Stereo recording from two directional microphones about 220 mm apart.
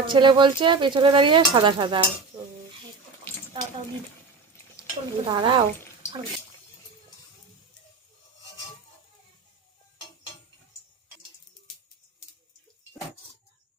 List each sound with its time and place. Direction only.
0.1 s speech: 20° right (ahead or behind)
4.8 s speech: 25° right (ahead or behind)